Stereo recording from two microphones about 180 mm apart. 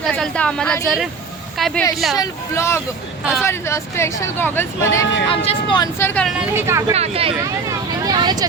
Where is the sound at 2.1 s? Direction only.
20° left (ahead or behind).